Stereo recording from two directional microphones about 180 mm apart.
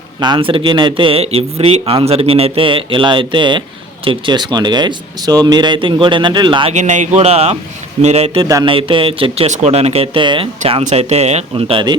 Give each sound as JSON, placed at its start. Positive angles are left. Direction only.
{"t": 0.2, "sound": "speech", "side_deg": -25}
{"t": 6.7, "sound": "speech", "side_deg": -40}
{"t": 8.4, "sound": "speech", "side_deg": -20}
{"t": 8.7, "sound": "speech", "side_deg": -30}